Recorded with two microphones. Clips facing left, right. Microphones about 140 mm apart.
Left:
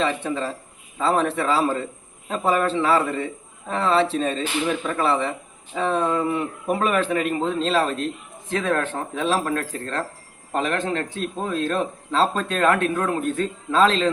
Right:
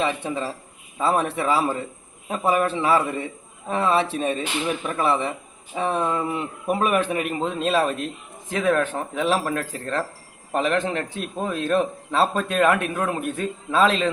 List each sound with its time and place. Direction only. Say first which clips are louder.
0.0 s speech: left 1 dB; 15° right (ahead or behind)